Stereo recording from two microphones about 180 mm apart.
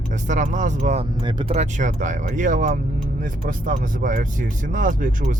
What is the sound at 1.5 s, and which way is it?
Speech, 40° right (ahead or behind).